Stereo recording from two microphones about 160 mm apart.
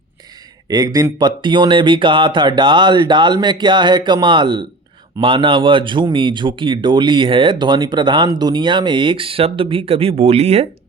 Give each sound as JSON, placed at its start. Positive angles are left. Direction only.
{"t": 0.7, "sound": "speech", "side_deg": -25}